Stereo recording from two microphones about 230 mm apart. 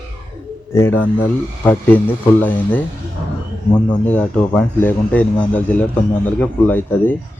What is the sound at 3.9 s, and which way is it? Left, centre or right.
Speech, centre.